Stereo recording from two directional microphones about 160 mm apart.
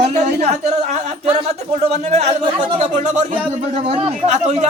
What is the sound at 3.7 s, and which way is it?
Speech, 35° right (ahead or behind).